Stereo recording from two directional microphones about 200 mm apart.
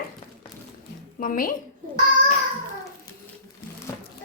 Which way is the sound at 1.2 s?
45° left (ahead or behind).